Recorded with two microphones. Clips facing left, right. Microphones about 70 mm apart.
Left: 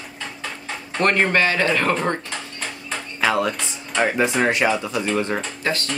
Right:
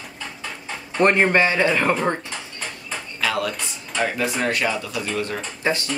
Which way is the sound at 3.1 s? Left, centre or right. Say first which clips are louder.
Left 4 dB; left.